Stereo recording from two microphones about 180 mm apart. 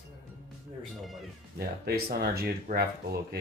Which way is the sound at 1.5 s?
60° right (ahead or behind).